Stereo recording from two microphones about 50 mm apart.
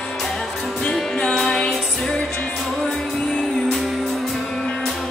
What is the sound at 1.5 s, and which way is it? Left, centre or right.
Music, centre.